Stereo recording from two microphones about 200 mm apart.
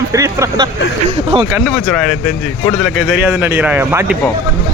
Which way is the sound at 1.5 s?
Centre (ahead or behind).